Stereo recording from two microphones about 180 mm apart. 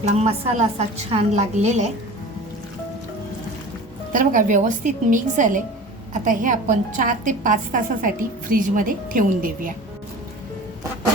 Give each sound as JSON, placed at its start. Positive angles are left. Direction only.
{"t": 0.2, "sound": "a woman's voice", "side_deg": -35}
{"t": 4.1, "sound": "a woman's voice", "side_deg": -50}